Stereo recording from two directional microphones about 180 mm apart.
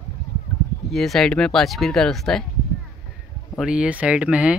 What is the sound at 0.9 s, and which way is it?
Speech, centre (ahead or behind).